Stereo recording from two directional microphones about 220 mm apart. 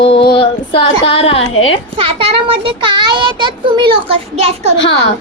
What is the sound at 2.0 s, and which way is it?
A child's voice, 25° right (ahead or behind).